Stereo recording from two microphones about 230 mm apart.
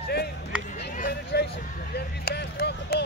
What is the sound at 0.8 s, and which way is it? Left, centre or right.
Vehicle, left.